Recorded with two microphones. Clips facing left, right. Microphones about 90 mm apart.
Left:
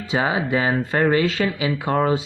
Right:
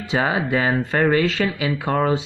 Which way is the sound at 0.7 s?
Centre (ahead or behind).